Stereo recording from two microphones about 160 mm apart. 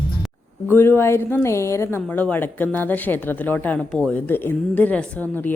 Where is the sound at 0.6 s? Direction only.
15° left (ahead or behind).